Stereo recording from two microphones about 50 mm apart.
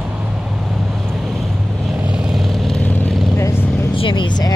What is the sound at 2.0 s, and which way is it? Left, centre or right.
Vehicle, right.